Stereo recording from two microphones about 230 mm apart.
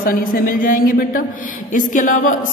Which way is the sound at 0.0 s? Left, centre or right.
Left.